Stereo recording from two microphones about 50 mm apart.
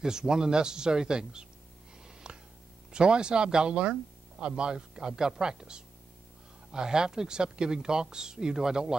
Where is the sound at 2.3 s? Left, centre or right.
Centre.